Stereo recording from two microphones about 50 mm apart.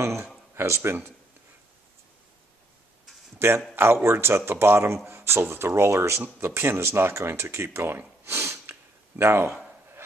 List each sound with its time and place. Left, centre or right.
0.6 s speech: right
3.3 s speech: right
6.4 s speech: right
8.3 s snort: right
9.2 s speech: right